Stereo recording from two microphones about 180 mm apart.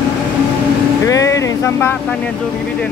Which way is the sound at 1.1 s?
20° left (ahead or behind).